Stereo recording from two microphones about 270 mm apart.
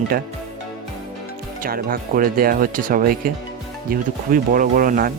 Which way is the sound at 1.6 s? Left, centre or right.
Right.